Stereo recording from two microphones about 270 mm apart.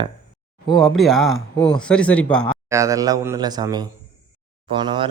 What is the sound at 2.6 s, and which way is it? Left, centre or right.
Speech, centre.